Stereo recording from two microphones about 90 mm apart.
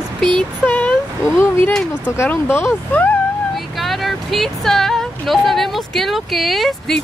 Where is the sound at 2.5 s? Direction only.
30° left (ahead or behind).